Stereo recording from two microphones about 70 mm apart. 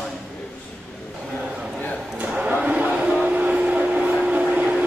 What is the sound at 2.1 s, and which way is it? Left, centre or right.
Vehicle, centre.